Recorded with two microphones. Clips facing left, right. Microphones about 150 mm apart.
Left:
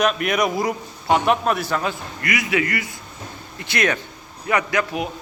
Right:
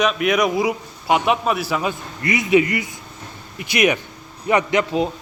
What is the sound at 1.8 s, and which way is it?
A man's voice, 25° right (ahead or behind).